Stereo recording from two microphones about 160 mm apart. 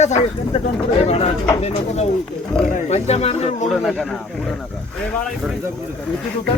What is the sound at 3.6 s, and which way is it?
Speech, centre (ahead or behind).